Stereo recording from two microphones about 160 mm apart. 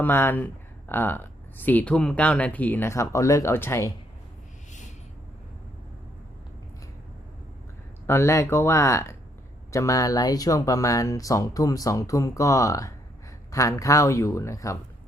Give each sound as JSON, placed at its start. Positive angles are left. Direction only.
{"t": 0.0, "sound": "speech", "side_deg": 15}
{"t": 8.0, "sound": "speech", "side_deg": 15}